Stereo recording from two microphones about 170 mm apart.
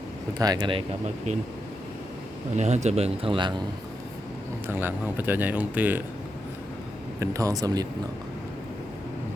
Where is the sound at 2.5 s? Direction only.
40° right (ahead or behind).